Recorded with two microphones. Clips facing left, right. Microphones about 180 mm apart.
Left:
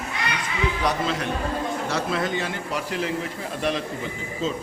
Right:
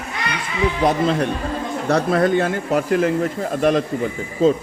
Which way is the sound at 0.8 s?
45° right (ahead or behind).